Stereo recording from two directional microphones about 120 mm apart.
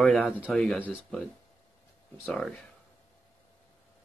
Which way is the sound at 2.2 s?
5° left (ahead or behind).